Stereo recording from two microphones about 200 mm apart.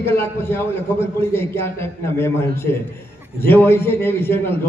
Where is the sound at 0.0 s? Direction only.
10° left (ahead or behind).